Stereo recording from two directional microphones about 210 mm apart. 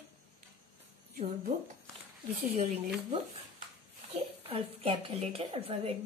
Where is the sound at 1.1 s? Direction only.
35° right (ahead or behind).